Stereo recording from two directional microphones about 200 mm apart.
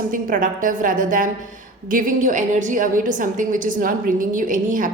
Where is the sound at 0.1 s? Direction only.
40° right (ahead or behind).